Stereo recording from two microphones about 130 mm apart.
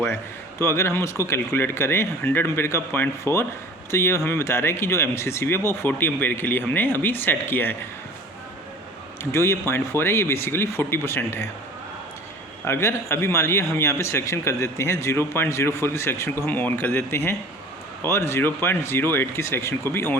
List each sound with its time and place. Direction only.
0.6 s speech: 20° left (ahead or behind)
9.3 s speech: 20° left (ahead or behind)
12.6 s speech: 20° left (ahead or behind)